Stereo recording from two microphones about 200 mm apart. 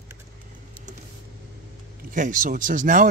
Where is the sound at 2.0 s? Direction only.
40° right (ahead or behind).